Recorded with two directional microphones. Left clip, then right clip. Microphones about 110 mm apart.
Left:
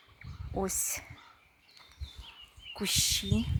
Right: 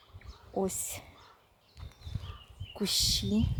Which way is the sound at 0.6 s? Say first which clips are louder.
Left 2 dB; 15° right (ahead or behind).